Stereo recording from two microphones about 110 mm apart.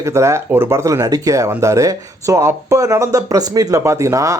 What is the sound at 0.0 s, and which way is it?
Speech, 25° right (ahead or behind).